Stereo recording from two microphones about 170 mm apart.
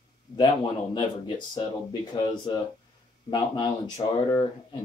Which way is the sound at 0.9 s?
25° left (ahead or behind).